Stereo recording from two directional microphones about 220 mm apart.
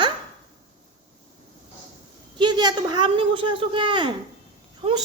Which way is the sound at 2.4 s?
20° right (ahead or behind).